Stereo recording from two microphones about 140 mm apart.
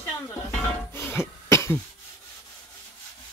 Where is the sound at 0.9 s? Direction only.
15° left (ahead or behind).